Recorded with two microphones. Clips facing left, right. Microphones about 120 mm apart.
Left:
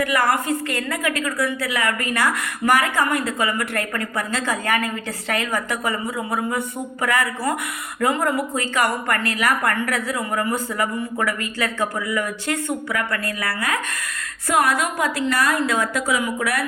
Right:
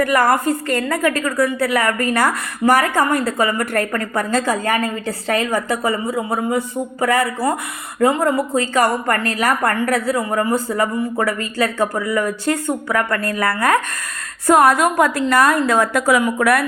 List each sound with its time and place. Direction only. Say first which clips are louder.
0.0 s a woman's voice: right 5 dB; 45° right (ahead or behind)